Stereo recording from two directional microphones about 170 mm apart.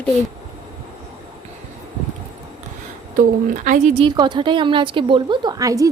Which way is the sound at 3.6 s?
45° right (ahead or behind).